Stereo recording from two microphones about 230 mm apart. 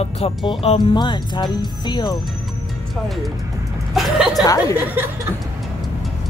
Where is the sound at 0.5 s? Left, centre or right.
Left.